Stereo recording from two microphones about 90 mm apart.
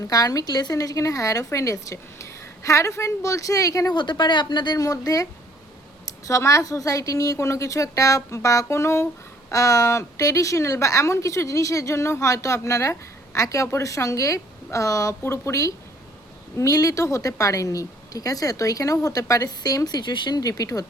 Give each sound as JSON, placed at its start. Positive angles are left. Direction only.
{"t": 0.0, "sound": "a woman's voice", "side_deg": 45}
{"t": 3.9, "sound": "speech", "side_deg": 60}
{"t": 4.8, "sound": "a woman's voice", "side_deg": 40}
{"t": 20.4, "sound": "a woman's voice", "side_deg": 40}